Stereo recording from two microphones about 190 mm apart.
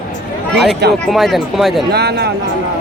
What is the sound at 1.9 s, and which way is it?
Speech, 60° right (ahead or behind).